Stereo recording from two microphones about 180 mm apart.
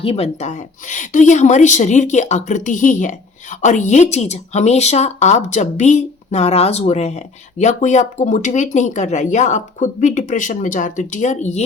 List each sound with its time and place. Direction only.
0.0 s speech: 35° left (ahead or behind)